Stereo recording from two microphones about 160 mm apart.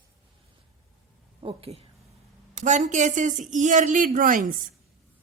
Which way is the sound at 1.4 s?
35° right (ahead or behind).